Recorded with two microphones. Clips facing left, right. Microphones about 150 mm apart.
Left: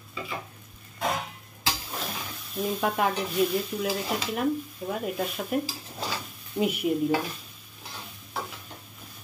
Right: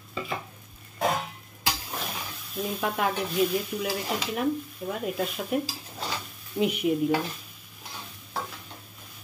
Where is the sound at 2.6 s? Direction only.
Centre (ahead or behind).